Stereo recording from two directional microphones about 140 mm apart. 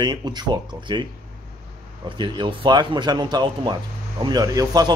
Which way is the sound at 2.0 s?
35° right (ahead or behind).